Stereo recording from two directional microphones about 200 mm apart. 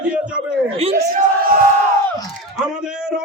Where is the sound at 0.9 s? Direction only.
45° right (ahead or behind).